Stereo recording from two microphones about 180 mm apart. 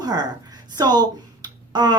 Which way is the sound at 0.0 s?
20° right (ahead or behind).